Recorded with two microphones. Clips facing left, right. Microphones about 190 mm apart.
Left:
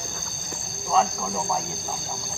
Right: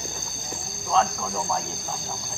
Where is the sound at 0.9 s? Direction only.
5° left (ahead or behind).